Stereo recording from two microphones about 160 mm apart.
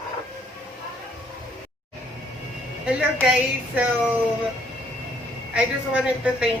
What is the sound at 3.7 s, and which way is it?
Speech, 10° right (ahead or behind).